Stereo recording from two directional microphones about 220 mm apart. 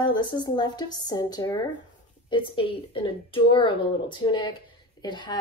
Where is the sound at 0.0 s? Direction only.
20° left (ahead or behind).